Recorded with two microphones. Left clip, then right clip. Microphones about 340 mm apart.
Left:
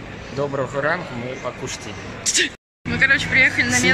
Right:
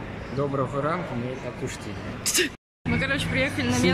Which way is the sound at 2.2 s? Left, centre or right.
Right.